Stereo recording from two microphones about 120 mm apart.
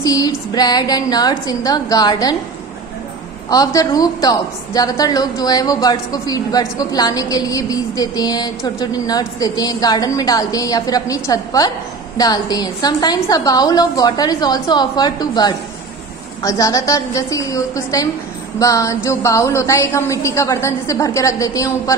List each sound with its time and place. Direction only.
0.0 s a woman's voice: 30° left (ahead or behind)
3.4 s a woman's voice: 30° left (ahead or behind)